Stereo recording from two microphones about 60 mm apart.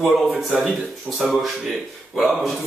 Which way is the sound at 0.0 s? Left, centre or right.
Centre.